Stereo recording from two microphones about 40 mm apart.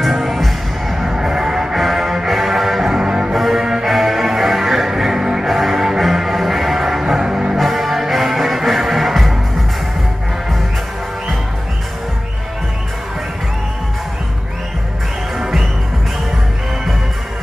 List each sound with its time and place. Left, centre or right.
0.1 s music: centre
7.5 s music: centre
15.3 s music: centre